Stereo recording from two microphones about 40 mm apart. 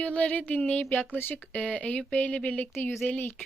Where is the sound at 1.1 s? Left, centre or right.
Left.